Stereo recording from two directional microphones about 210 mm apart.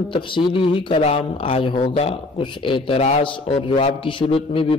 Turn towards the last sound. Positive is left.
turn(degrees=25)  # may be behind; listen again after turning